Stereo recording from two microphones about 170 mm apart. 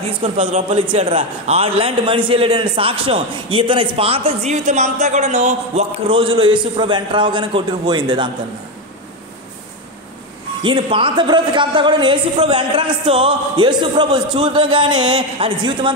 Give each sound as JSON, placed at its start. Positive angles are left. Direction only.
{"t": 0.2, "sound": "a man's voice", "side_deg": -45}
{"t": 10.6, "sound": "a woman's voice", "side_deg": -30}